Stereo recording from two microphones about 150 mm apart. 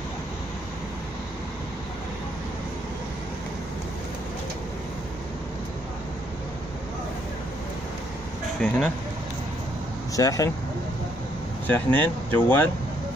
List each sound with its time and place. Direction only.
8.5 s speech: 5° left (ahead or behind)
10.1 s speech: 25° left (ahead or behind)
11.6 s speech: 10° left (ahead or behind)